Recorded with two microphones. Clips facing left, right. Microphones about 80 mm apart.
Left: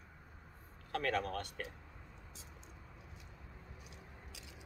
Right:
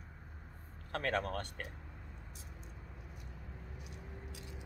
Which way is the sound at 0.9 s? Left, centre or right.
Right.